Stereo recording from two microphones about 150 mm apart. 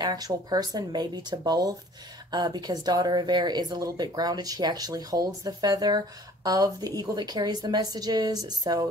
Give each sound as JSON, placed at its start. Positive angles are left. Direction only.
{"t": 0.0, "sound": "speech", "side_deg": -25}